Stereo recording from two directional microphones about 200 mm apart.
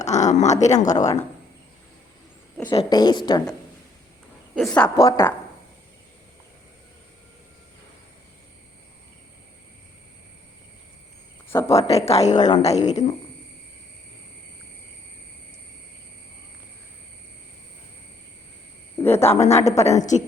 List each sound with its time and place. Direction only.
0.0 s speech: 35° left (ahead or behind)
0.9 s speech: 15° left (ahead or behind)
2.6 s a woman's voice: 20° left (ahead or behind)
4.5 s speech: 5° left (ahead or behind)
11.4 s speech: 15° left (ahead or behind)
12.0 s speech: 35° left (ahead or behind)
19.0 s a sound: 15° left (ahead or behind)
19.3 s speech: 30° left (ahead or behind)